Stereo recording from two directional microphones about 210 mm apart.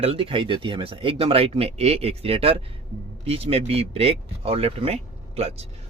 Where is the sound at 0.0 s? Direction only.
25° right (ahead or behind).